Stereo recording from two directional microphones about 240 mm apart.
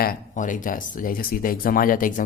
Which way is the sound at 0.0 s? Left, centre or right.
Left.